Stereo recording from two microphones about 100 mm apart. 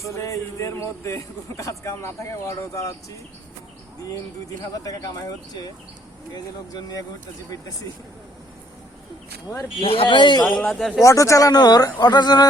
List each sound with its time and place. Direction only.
0.2 s speech: 30° left (ahead or behind)
4.7 s speech: 35° left (ahead or behind)
9.8 s speech: 70° left (ahead or behind)
10.2 s speech: 45° left (ahead or behind)
10.7 s speech: 5° left (ahead or behind)
11.0 s speech: 30° left (ahead or behind)